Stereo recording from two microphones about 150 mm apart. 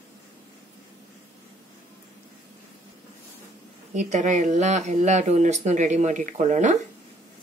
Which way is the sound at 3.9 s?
55° right (ahead or behind).